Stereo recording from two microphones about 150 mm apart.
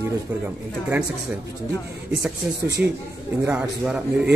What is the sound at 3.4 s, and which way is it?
Speech, 10° right (ahead or behind).